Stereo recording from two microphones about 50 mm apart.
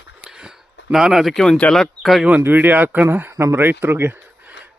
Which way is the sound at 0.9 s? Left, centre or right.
Centre.